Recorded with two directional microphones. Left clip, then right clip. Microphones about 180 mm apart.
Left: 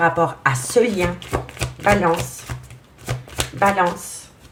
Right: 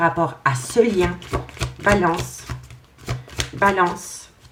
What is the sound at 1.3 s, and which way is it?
Speech, 5° left (ahead or behind).